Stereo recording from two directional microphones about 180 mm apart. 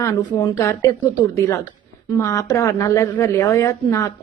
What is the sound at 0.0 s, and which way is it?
Speech, 20° left (ahead or behind).